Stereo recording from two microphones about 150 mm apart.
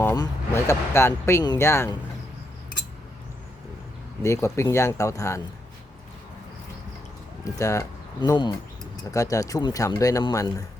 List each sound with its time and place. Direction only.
0.0 s speech: 20° left (ahead or behind)
4.2 s speech: 20° left (ahead or behind)
7.4 s speech: 20° left (ahead or behind)